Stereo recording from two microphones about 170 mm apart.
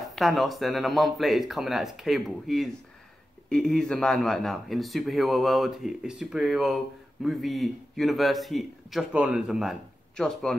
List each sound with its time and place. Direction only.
0.1 s a man's voice: centre (ahead or behind)